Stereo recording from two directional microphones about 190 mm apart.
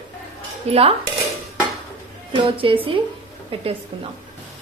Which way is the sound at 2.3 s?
25° right (ahead or behind).